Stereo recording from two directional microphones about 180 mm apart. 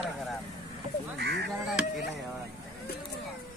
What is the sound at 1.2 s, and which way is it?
Speech, 70° right (ahead or behind).